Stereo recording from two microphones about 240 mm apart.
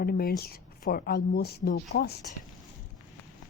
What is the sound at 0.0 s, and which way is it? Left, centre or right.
A woman's voice, left.